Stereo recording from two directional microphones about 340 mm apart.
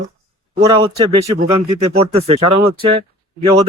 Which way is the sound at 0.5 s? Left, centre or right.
Centre.